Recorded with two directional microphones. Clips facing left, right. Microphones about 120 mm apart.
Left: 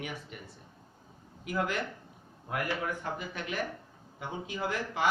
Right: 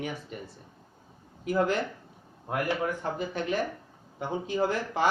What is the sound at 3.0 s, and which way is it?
Speech, 35° right (ahead or behind).